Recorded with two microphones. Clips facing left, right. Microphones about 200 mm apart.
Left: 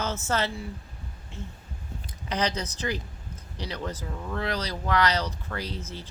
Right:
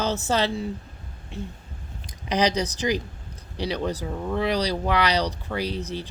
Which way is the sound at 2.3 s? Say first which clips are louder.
Right 6 dB; 15° right (ahead or behind).